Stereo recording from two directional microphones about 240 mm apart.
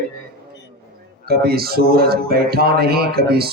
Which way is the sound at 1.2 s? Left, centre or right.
Right.